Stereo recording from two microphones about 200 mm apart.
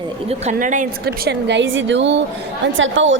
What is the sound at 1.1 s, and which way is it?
A woman's voice, 55° right (ahead or behind).